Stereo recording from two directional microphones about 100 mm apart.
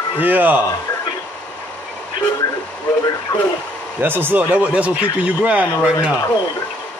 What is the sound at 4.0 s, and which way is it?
Speech, 20° right (ahead or behind).